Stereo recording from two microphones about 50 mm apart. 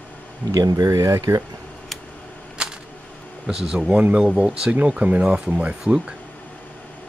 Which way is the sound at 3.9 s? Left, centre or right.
Right.